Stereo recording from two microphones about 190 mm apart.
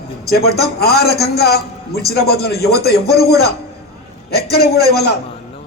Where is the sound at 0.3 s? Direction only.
55° left (ahead or behind).